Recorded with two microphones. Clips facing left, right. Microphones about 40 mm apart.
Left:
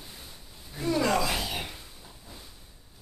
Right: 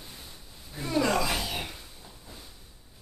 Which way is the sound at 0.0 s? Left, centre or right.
Centre.